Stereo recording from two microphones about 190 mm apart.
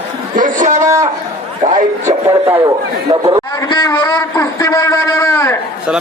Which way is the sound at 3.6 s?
20° left (ahead or behind).